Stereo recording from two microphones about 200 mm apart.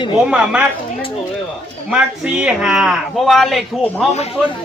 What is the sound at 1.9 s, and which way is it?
Speech, 5° right (ahead or behind).